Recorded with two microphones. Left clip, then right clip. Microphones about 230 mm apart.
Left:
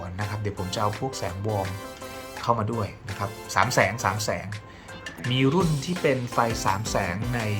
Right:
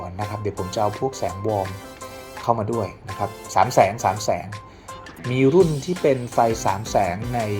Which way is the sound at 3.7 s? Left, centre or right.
Left.